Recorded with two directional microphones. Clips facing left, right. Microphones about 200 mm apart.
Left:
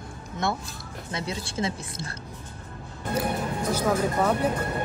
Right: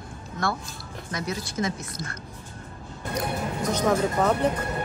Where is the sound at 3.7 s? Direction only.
10° left (ahead or behind).